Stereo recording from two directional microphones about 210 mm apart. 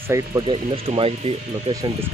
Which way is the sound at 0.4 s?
25° right (ahead or behind).